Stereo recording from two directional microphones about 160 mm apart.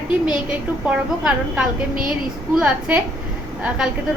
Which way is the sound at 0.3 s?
5° right (ahead or behind).